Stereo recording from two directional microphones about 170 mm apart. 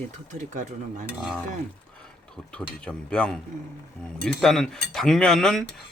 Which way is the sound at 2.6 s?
5° left (ahead or behind).